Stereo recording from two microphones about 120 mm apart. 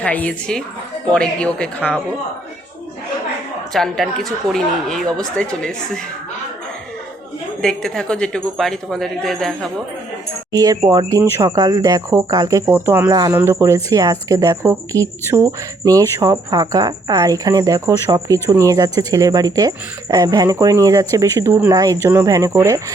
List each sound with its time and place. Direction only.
0.0 s a woman's voice: 10° left (ahead or behind)
3.7 s a woman's voice: centre (ahead or behind)
7.6 s a woman's voice: 5° left (ahead or behind)
10.5 s speech: 30° right (ahead or behind)